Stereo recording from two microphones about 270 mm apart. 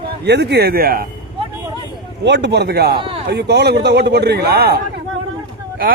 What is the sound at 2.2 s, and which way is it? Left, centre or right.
A man's voice, right.